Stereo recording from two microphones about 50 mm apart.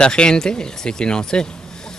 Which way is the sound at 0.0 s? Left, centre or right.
Centre.